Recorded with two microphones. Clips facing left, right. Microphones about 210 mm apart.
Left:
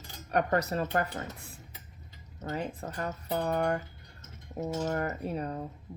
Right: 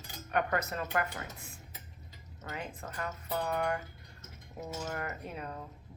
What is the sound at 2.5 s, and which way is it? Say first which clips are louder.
Speech: left 6 dB; 35° left (ahead or behind).